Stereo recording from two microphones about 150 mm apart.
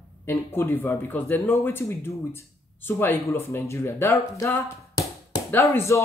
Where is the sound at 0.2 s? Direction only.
15° left (ahead or behind).